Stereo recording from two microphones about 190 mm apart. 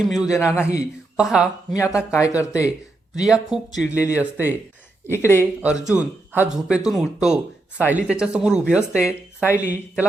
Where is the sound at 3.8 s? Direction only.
15° left (ahead or behind).